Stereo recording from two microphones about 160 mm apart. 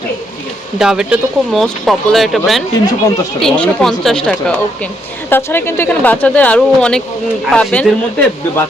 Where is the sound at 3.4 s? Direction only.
5° left (ahead or behind).